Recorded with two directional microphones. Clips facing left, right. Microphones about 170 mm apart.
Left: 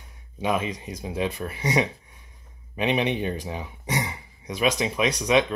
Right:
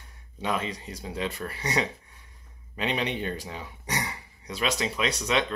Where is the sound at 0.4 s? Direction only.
15° left (ahead or behind).